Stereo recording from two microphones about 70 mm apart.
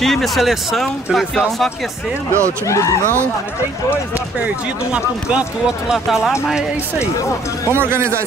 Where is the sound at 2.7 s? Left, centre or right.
Left.